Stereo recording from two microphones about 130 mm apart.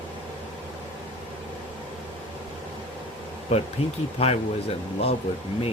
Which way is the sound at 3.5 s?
60° left (ahead or behind).